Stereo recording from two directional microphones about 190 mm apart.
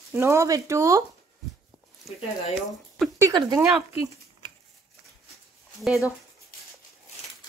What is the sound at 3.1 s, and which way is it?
Speech, 15° right (ahead or behind).